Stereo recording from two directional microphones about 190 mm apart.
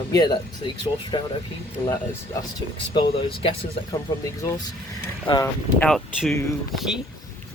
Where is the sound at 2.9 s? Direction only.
25° left (ahead or behind).